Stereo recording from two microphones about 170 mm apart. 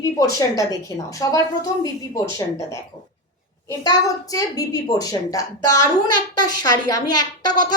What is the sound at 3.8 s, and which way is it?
A child's voice, 20° left (ahead or behind).